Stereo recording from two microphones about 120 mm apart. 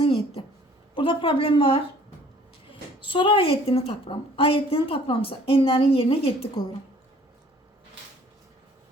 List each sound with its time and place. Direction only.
0.0 s a sound: 50° left (ahead or behind)
0.9 s a woman's voice: 45° left (ahead or behind)
3.0 s a woman's voice: 45° left (ahead or behind)